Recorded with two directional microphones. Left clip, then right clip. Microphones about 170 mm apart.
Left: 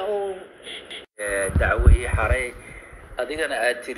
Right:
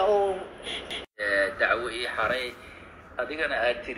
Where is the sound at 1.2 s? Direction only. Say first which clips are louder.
Left 1 dB; 45° left (ahead or behind).